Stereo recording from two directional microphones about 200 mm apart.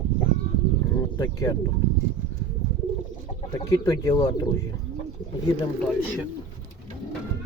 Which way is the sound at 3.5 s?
20° left (ahead or behind).